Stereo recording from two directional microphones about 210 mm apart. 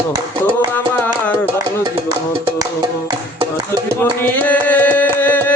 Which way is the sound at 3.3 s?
20° right (ahead or behind).